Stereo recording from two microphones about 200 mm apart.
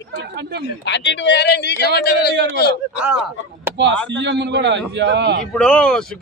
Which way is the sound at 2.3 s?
65° right (ahead or behind).